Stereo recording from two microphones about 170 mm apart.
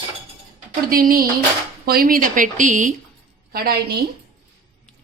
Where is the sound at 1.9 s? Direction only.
60° right (ahead or behind).